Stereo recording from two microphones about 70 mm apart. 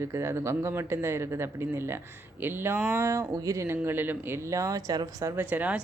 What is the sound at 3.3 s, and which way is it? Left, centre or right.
Speech, right.